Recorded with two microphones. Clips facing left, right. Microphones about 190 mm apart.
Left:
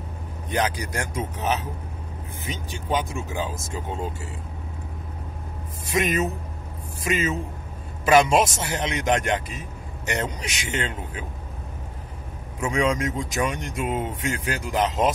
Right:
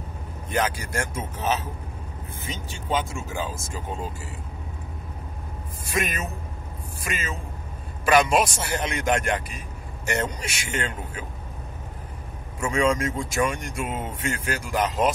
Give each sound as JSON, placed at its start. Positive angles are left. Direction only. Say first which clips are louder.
{"t": 0.5, "sound": "speech", "louder": "left 1 dB", "side_deg": 15}
{"t": 5.9, "sound": "a man's voice", "louder": "left 5 dB", "side_deg": 20}
{"t": 12.5, "sound": "speech", "louder": "even", "side_deg": 20}